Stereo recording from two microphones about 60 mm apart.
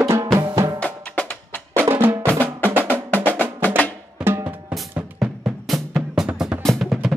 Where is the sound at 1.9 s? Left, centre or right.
Right.